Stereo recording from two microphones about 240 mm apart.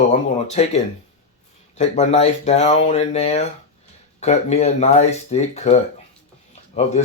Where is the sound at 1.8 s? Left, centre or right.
Left.